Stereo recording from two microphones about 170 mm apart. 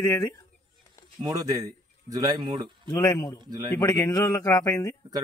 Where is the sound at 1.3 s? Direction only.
20° right (ahead or behind).